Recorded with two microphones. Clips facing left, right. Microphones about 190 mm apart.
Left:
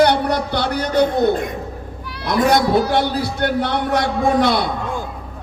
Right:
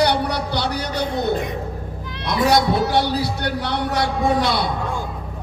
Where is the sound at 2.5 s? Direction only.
55° left (ahead or behind).